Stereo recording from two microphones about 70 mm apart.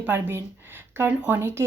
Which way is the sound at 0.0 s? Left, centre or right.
Right.